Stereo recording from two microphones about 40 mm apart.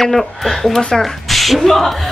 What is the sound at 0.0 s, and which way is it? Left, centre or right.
Speech, centre.